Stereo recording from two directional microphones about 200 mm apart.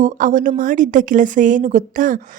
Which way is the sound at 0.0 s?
40° right (ahead or behind).